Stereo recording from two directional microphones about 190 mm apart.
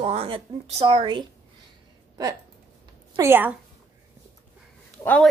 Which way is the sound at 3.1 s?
15° right (ahead or behind).